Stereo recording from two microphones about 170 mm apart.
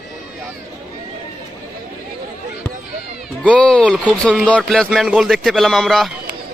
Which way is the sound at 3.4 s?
5° left (ahead or behind).